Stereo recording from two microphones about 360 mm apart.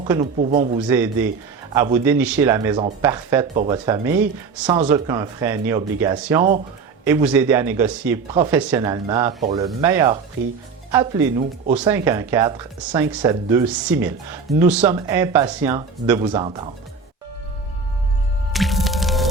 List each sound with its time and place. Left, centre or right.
0.1 s speech: centre
0.9 s speech: centre
18.5 s music: centre